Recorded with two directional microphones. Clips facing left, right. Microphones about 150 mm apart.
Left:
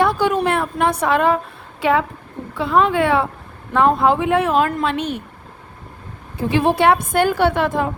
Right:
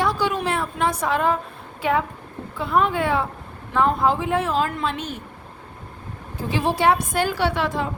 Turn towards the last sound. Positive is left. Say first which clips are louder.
# left 5 dB
turn(degrees=55)  # may be behind; listen again after turning